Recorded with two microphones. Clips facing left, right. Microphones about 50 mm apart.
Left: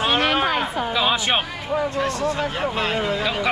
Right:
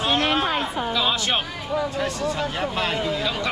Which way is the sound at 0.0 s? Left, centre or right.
Left.